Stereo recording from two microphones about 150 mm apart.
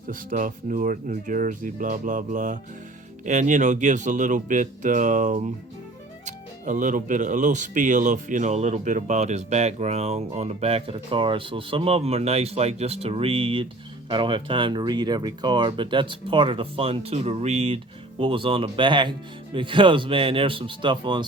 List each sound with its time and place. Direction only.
0.1 s speech: 60° right (ahead or behind); by 21.2 s 30° right (ahead or behind)